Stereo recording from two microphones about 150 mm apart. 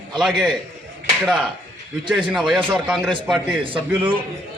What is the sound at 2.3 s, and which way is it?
Speech, centre (ahead or behind).